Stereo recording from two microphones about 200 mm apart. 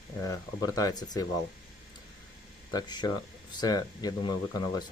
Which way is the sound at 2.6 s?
20° left (ahead or behind).